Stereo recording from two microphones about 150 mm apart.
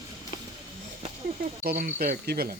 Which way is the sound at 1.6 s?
80° right.